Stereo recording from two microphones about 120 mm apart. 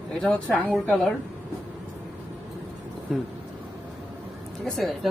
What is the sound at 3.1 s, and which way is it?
Speech, centre (ahead or behind).